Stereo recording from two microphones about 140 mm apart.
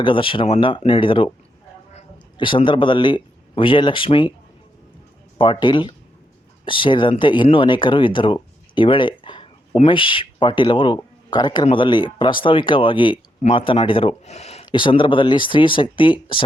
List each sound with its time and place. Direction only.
0.0 s speech: 40° left (ahead or behind)
2.4 s speech: 35° left (ahead or behind)
5.4 s speech: 35° left (ahead or behind); by 14.6 s 50° left (ahead or behind)
14.6 s speech: 35° left (ahead or behind)